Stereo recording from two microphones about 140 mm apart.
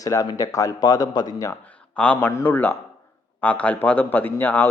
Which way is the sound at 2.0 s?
10° left (ahead or behind).